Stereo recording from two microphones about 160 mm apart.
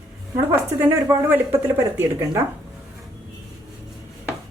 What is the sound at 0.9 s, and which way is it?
A woman's voice, 15° right (ahead or behind).